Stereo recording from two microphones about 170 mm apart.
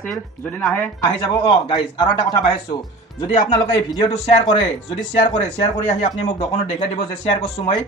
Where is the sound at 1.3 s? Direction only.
30° left (ahead or behind).